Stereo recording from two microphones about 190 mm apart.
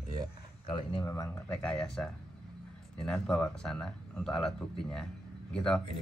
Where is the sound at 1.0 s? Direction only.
15° left (ahead or behind).